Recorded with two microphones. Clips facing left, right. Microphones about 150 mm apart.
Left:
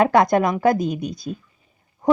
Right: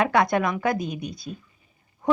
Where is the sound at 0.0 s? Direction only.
45° left (ahead or behind).